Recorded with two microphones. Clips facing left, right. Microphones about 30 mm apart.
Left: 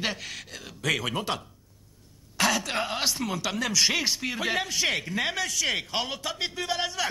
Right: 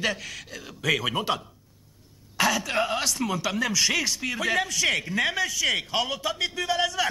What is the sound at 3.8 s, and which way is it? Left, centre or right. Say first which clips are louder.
Speech: even; left.